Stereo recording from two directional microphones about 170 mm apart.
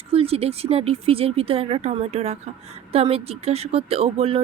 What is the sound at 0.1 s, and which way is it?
Speech, 35° right (ahead or behind).